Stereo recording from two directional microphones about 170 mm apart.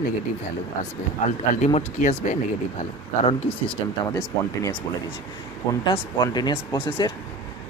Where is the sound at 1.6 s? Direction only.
45° left (ahead or behind).